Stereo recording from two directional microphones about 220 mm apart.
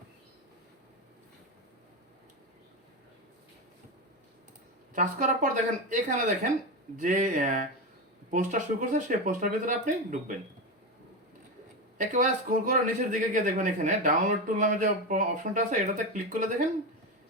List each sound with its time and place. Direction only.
4.9 s speech: 35° right (ahead or behind)
11.9 s speech: 35° right (ahead or behind)